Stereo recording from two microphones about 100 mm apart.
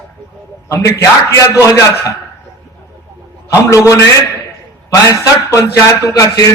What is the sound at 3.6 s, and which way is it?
Speech, 30° left (ahead or behind).